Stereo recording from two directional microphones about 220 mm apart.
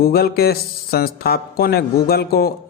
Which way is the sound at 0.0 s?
45° left (ahead or behind).